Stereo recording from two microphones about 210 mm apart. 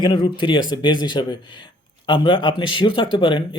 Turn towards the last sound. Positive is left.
turn(degrees=25)  # may be behind; listen again after turning